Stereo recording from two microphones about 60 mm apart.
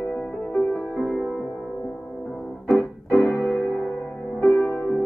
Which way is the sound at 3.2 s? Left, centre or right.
Left.